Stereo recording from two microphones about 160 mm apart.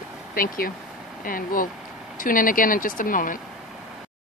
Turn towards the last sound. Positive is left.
turn(degrees=55)  # may be behind; listen again after turning